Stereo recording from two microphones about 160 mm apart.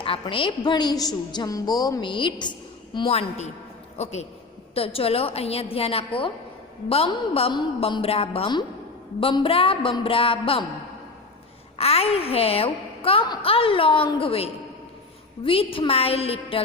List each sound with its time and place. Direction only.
0.0 s a woman's voice: 35° left (ahead or behind)
11.8 s a woman's voice: 40° left (ahead or behind)